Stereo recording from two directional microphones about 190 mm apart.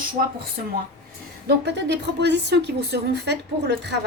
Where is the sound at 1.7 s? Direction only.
65° right (ahead or behind).